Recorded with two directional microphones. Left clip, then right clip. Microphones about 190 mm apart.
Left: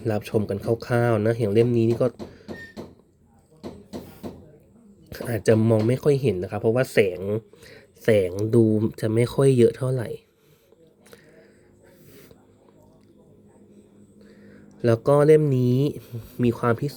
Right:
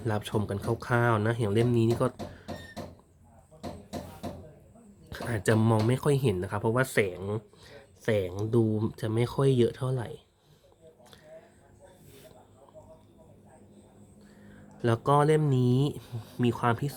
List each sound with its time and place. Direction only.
0.0 s speech: 15° left (ahead or behind)
5.0 s speech: 15° left (ahead or behind)
14.8 s speech: 20° left (ahead or behind)